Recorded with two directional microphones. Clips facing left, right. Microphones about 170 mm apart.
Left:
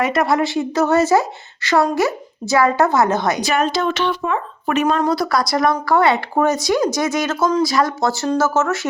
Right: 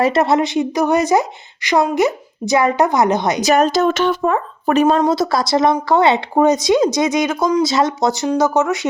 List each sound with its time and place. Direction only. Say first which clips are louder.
0.0 s speech: right 3 dB; 25° right (ahead or behind)
3.4 s speech: right 5 dB; 40° right (ahead or behind)
4.9 s speech: right 2 dB; 25° right (ahead or behind)